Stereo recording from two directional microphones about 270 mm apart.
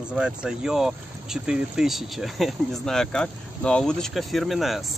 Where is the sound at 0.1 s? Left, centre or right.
Centre.